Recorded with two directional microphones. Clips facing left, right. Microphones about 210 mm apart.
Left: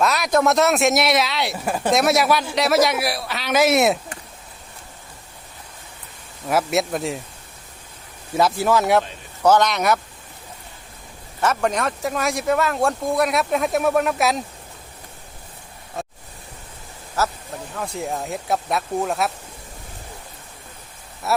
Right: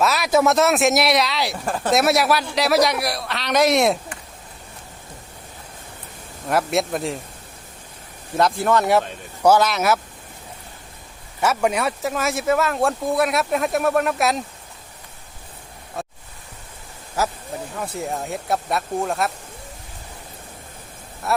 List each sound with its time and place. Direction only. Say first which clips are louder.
0.0 s speech: right 1 dB; centre (ahead or behind)
1.9 s speech: even; centre (ahead or behind)
6.5 s speech: even; centre (ahead or behind)
8.4 s speech: even; 5° left (ahead or behind)
11.3 s speech: right 1 dB; 10° right (ahead or behind)
17.2 s speech: even; 10° right (ahead or behind)
21.2 s speech: left 1 dB; 5° left (ahead or behind)